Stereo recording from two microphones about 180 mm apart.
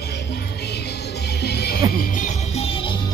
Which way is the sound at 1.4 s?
65° left (ahead or behind).